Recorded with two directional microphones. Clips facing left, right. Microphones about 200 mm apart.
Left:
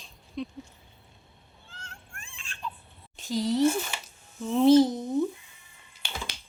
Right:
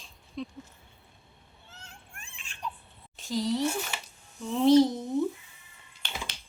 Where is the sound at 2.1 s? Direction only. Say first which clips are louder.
Left 3 dB; 15° right (ahead or behind).